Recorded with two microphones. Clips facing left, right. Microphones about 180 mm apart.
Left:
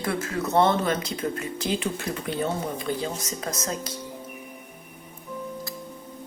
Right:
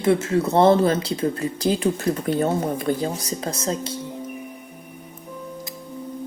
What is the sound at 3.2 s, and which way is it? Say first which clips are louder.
Speech: right 4 dB; 30° right (ahead or behind).